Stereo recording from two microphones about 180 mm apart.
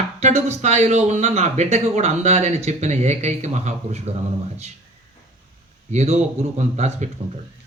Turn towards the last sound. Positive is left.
turn(degrees=-40)  # may be behind; listen again after turning